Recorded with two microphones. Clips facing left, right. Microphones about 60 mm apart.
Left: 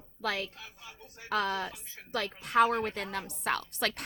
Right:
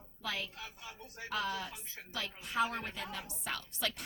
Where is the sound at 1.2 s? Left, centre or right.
Left.